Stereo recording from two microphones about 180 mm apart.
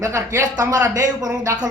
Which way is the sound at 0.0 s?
15° right (ahead or behind).